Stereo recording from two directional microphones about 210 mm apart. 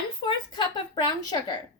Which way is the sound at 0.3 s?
20° left (ahead or behind).